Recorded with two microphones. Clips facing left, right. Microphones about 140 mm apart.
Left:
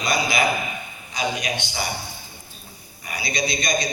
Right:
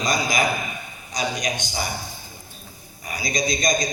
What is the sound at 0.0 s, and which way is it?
A man's voice, 40° right (ahead or behind).